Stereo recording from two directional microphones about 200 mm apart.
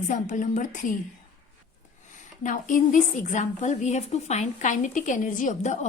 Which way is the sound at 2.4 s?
40° left (ahead or behind).